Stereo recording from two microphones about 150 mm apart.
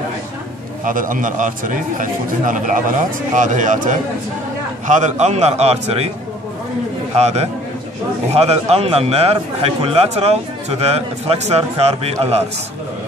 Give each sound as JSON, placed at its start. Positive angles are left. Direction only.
{"t": 0.8, "sound": "a man's voice", "side_deg": -65}
{"t": 7.2, "sound": "a man's voice", "side_deg": -45}